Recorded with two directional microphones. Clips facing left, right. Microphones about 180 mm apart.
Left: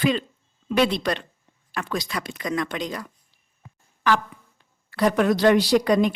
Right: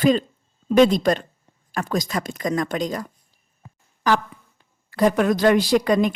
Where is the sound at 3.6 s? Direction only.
40° right (ahead or behind).